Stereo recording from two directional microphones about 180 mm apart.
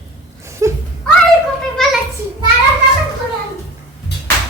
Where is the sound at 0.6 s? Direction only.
15° right (ahead or behind).